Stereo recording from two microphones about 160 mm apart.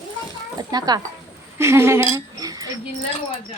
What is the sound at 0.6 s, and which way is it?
Speech, 25° right (ahead or behind).